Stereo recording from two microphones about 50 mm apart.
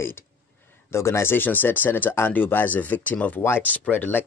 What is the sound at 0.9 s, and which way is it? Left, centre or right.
Speech, left.